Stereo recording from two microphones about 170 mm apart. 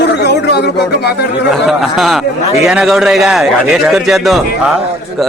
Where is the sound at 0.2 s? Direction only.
85° left.